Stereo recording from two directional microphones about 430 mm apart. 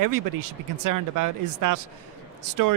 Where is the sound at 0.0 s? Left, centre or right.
Right.